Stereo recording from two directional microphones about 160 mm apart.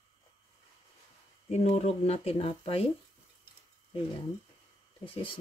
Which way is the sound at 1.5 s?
45° left (ahead or behind).